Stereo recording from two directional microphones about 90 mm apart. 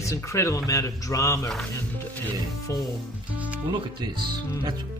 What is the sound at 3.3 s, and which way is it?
Speech, 15° right (ahead or behind).